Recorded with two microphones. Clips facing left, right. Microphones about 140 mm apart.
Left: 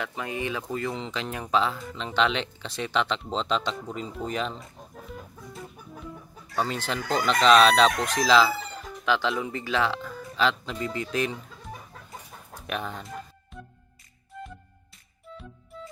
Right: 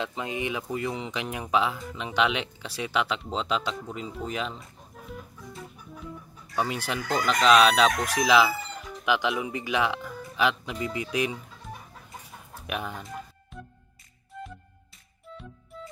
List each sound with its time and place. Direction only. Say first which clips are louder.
0.0 s speech: right 1 dB; 20° right (ahead or behind); by 4.6 s 5° right (ahead or behind)
5.0 s chicken: right 2 dB; centre (ahead or behind)
6.5 s speech: even; 10° right (ahead or behind)
9.9 s music: left 1 dB; 5° right (ahead or behind)
10.3 s speech: even; 15° right (ahead or behind)
12.6 s music: left 1 dB; 10° right (ahead or behind)